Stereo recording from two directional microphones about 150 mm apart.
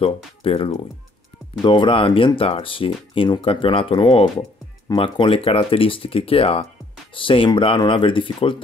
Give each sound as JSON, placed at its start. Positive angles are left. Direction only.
{"t": 0.0, "sound": "speech", "side_deg": 40}